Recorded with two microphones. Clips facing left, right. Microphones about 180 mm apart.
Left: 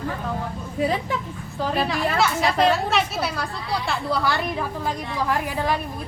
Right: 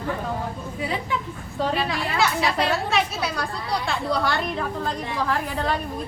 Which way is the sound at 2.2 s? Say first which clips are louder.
Left 2 dB; centre (ahead or behind).